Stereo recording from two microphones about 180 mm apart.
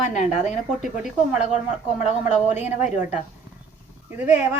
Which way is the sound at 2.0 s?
10° right (ahead or behind).